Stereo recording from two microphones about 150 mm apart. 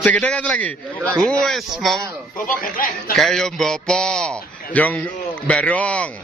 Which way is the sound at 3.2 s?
Centre (ahead or behind).